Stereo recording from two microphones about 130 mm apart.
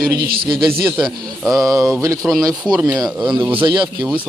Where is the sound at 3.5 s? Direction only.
40° right (ahead or behind).